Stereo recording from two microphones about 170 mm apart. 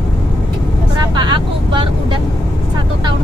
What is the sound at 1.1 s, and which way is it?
Vehicle, 25° right (ahead or behind).